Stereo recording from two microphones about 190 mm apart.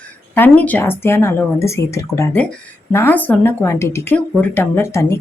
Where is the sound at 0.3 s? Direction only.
10° left (ahead or behind).